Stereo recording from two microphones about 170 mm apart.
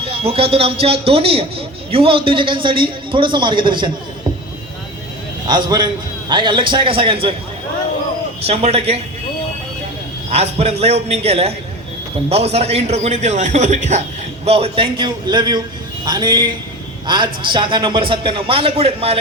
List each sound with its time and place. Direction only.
0.0 s a man's voice: 35° right (ahead or behind)
5.5 s a man's voice: 25° right (ahead or behind)
8.4 s a man's voice: 40° right (ahead or behind)
10.3 s a man's voice: 40° right (ahead or behind)